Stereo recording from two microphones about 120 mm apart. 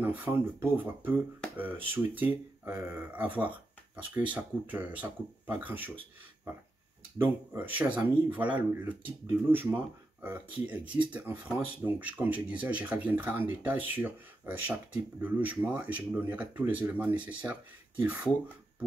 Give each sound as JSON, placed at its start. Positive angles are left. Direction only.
{"t": 0.0, "sound": "speech", "side_deg": -15}
{"t": 7.2, "sound": "speech", "side_deg": -15}
{"t": 11.1, "sound": "speech", "side_deg": -15}